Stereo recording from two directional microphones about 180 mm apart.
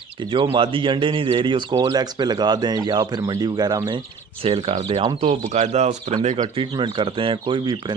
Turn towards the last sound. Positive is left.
turn(degrees=-25)  # may be behind; listen again after turning